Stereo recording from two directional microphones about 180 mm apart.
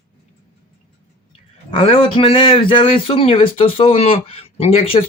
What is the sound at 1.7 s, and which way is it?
A man's voice, 30° left (ahead or behind).